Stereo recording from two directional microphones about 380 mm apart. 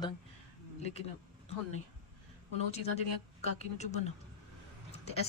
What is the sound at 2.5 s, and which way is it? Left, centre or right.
A woman's voice, centre.